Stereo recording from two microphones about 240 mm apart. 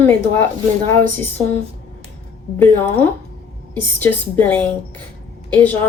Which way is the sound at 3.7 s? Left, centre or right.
Centre.